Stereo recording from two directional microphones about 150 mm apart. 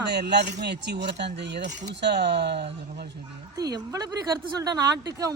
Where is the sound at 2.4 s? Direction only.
90° right.